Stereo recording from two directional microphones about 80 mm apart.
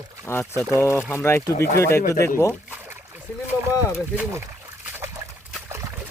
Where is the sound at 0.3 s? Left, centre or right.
Left.